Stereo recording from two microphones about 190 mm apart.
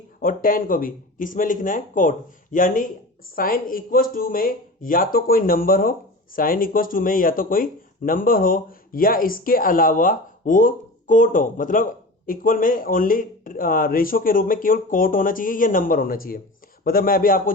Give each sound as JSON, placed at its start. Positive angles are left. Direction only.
{"t": 0.2, "sound": "speech", "side_deg": 45}